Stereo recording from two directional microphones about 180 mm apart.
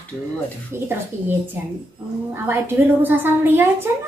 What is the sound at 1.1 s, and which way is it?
Speech, 40° right (ahead or behind).